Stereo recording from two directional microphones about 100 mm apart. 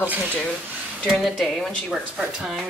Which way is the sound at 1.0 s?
Centre (ahead or behind).